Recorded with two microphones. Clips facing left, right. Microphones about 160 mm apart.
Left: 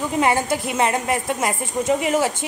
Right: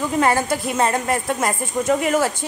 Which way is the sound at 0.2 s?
15° left (ahead or behind).